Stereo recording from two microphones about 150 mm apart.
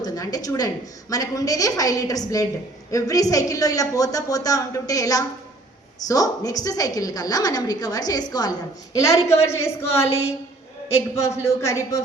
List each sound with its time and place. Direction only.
0.0 s a woman's voice: 25° left (ahead or behind)
9.2 s a woman's voice: 45° left (ahead or behind)
11.2 s a woman's voice: 20° left (ahead or behind)